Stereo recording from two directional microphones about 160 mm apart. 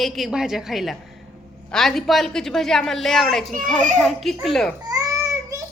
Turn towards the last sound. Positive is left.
turn(degrees=-20)  # may be behind; listen again after turning